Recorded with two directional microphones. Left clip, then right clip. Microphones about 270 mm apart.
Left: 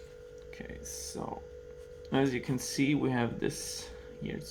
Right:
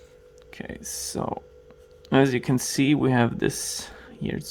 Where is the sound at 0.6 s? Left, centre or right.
Right.